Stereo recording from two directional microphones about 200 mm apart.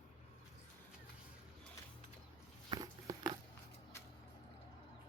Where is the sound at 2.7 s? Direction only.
20° right (ahead or behind).